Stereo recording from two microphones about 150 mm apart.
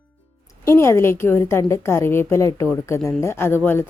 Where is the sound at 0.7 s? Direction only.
15° left (ahead or behind).